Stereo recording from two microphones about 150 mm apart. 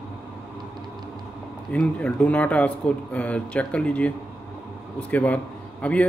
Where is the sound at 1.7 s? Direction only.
10° left (ahead or behind).